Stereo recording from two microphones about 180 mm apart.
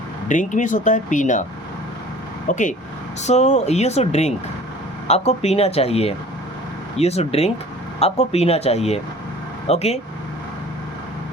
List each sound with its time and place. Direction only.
0.3 s speech: 45° left (ahead or behind)
2.5 s speech: 45° left (ahead or behind)